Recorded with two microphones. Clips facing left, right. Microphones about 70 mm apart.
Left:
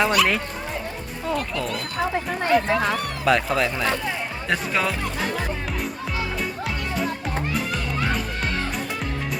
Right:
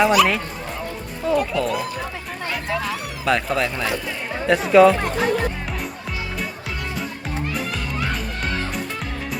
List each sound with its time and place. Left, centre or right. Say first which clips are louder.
0.0 s speech: right 4 dB; centre
2.1 s speech: left 8 dB; left
3.2 s speech: even; centre